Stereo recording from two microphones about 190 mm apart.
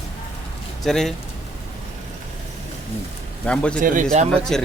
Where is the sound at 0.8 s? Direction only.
Centre (ahead or behind).